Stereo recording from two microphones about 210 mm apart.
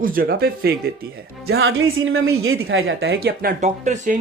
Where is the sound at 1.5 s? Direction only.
70° right (ahead or behind).